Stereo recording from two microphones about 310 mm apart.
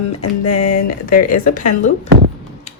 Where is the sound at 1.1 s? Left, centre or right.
Left.